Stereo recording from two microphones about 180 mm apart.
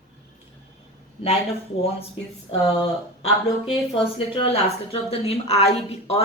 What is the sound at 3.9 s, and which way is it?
A woman's voice, 30° left (ahead or behind).